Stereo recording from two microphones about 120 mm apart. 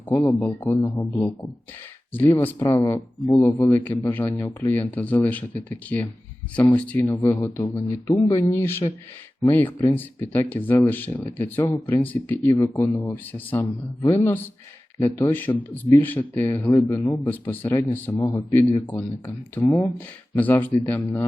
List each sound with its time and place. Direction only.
0.1 s speech: 15° left (ahead or behind)
12.5 s speech: 25° left (ahead or behind)
14.9 s speech: 25° left (ahead or behind)
18.2 s speech: 30° left (ahead or behind)
18.9 s speech: 20° left (ahead or behind)